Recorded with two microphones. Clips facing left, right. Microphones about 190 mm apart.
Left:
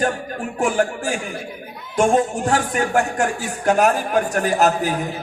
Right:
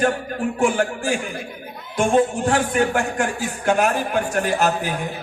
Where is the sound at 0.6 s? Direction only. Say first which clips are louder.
Left 1 dB; 40° left (ahead or behind).